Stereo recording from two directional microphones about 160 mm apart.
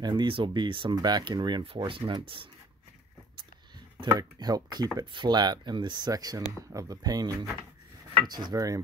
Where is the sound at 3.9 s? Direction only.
25° right (ahead or behind).